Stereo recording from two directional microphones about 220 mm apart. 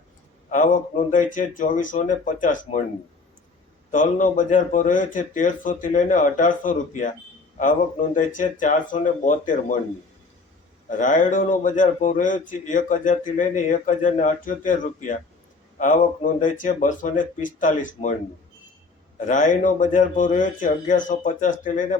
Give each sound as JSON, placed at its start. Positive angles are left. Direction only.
{"t": 0.5, "sound": "a man's voice", "side_deg": 35}
{"t": 3.9, "sound": "a man's voice", "side_deg": 35}
{"t": 10.8, "sound": "a man's voice", "side_deg": 35}
{"t": 19.2, "sound": "a man's voice", "side_deg": 35}